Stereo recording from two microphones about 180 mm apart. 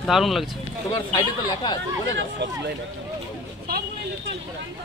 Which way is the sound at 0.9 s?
25° left (ahead or behind).